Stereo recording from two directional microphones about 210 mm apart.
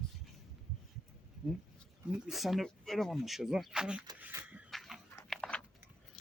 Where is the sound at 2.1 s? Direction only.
Centre (ahead or behind).